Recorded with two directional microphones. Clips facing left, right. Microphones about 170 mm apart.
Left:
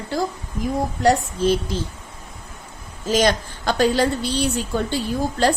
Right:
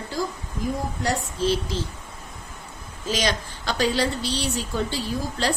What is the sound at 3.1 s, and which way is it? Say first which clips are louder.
A woman's voice: left 7 dB; 50° left (ahead or behind).